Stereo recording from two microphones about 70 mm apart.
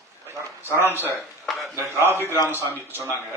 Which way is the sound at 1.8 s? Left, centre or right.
Right.